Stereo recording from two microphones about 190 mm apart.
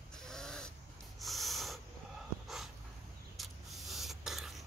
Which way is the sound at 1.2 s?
Centre (ahead or behind).